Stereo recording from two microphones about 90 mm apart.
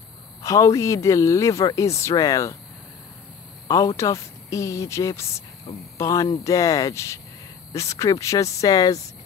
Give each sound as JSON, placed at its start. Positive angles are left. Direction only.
{"t": 0.4, "sound": "speech", "side_deg": 40}
{"t": 3.6, "sound": "speech", "side_deg": 40}